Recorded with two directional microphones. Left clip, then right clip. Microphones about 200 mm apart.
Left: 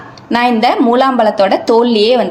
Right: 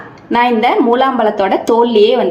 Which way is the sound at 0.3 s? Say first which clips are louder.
Even; 30° left (ahead or behind).